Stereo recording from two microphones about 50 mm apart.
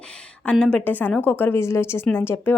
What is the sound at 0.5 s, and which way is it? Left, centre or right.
A woman's voice, left.